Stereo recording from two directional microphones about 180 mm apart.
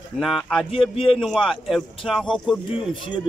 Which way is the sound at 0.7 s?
30° left (ahead or behind).